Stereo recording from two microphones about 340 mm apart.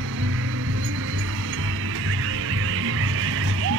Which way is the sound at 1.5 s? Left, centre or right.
Right.